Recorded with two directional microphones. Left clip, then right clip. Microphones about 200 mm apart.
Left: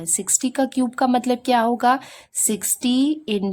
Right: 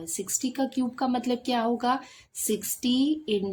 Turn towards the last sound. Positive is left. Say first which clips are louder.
# left 5 dB
turn(degrees=40)  # may be behind; listen again after turning